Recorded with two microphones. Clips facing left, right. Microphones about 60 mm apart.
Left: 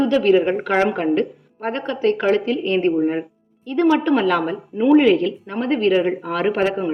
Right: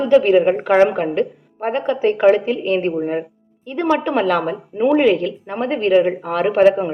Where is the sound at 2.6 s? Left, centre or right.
Centre.